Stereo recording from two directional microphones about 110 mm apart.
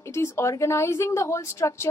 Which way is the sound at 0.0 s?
25° left (ahead or behind).